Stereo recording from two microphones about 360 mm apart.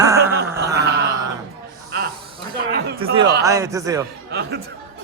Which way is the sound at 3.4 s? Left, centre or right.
Centre.